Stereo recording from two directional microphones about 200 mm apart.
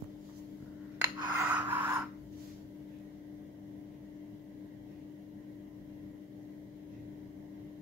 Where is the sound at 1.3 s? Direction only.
10° right (ahead or behind).